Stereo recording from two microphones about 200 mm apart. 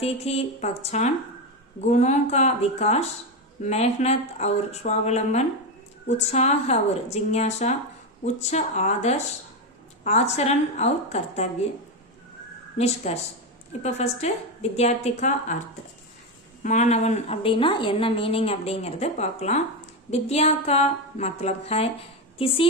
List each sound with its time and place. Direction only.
0.0 s a woman's voice: 30° left (ahead or behind)
12.7 s a woman's voice: 30° left (ahead or behind)
16.6 s a woman's voice: 35° left (ahead or behind)